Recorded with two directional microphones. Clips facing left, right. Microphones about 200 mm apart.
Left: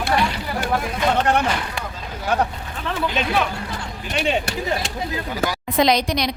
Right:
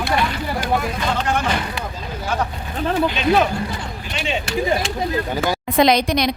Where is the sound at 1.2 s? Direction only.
60° left (ahead or behind).